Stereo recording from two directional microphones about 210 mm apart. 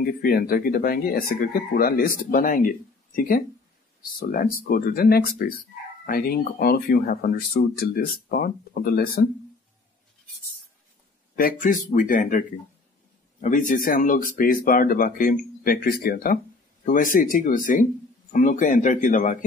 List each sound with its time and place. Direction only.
0.2 s speech: 45° left (ahead or behind)
11.3 s speech: 40° left (ahead or behind)